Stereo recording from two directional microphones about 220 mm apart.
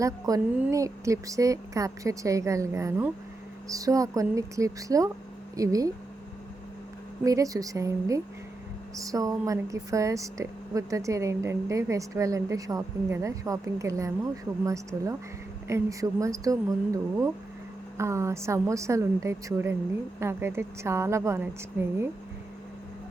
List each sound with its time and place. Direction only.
0.0 s speech: 15° right (ahead or behind)
7.3 s speech: 15° right (ahead or behind)